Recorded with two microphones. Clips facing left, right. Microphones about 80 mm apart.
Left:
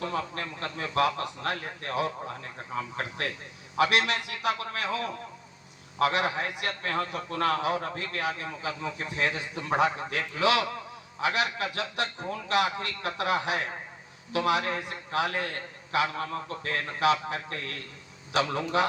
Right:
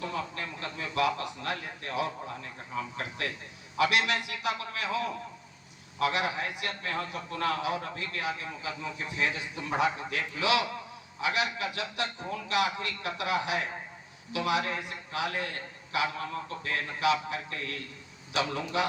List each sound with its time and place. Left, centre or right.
0.0 s a man's voice: left